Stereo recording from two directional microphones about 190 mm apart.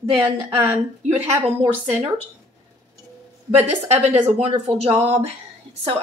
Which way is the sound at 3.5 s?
35° right (ahead or behind).